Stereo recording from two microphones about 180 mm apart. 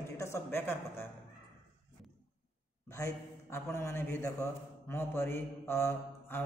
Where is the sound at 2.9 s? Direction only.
15° left (ahead or behind).